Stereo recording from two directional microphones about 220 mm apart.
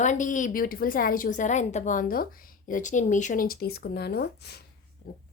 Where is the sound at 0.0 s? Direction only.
35° left (ahead or behind).